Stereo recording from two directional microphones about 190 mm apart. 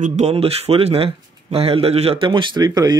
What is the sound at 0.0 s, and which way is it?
Speech, 35° right (ahead or behind).